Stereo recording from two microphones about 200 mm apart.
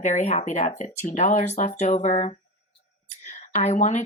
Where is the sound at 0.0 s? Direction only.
35° left (ahead or behind).